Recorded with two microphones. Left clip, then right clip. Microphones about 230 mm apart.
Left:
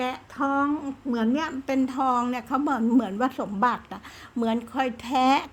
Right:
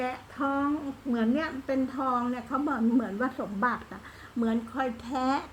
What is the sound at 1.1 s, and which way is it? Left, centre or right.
A woman's voice, left.